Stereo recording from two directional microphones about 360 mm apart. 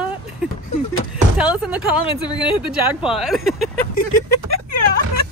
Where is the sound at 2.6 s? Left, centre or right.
Centre.